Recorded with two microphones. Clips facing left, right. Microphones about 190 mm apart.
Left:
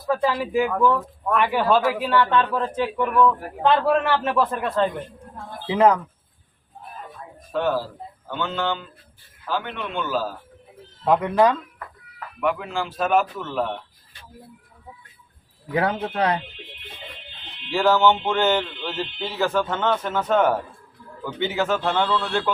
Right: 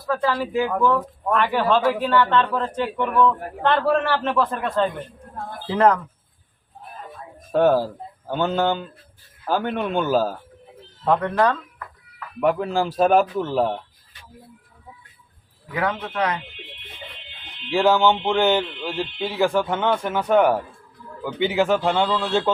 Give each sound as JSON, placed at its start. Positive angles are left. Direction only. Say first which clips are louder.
{"t": 0.0, "sound": "speech", "louder": "even", "side_deg": 15}
{"t": 7.5, "sound": "a man's voice", "louder": "right 6 dB", "side_deg": -45}
{"t": 11.0, "sound": "speech", "louder": "left 1 dB", "side_deg": 10}
{"t": 12.4, "sound": "a man's voice", "louder": "right 4 dB", "side_deg": -40}
{"t": 15.7, "sound": "speech", "louder": "left 2 dB", "side_deg": 30}
{"t": 17.7, "sound": "speech", "louder": "right 1 dB", "side_deg": -15}